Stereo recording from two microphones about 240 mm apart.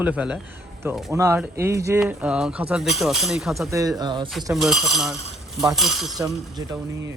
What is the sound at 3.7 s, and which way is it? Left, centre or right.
Speech, centre.